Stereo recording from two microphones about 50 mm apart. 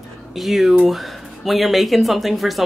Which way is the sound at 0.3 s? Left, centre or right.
Centre.